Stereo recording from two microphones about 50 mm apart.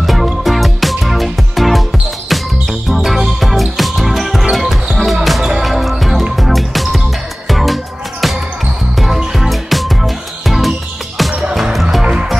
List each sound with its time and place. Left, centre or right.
0.0 s music: centre
11.7 s music: centre
12.0 s music: centre